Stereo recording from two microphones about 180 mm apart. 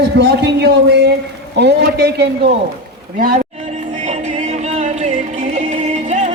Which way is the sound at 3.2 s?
55° right (ahead or behind).